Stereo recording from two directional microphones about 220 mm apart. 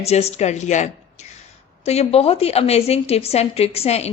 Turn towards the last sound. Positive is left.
turn(degrees=30)  # may be behind; listen again after turning